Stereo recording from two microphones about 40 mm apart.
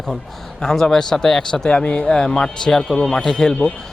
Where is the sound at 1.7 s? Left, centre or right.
Left.